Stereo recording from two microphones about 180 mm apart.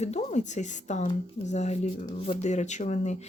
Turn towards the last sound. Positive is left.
turn(degrees=40)  # may be behind; listen again after turning